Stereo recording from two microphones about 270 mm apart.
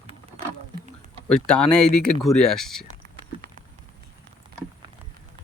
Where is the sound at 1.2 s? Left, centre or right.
Centre.